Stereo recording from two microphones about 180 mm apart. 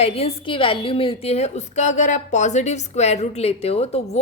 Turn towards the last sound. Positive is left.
turn(degrees=35)  # may be behind; listen again after turning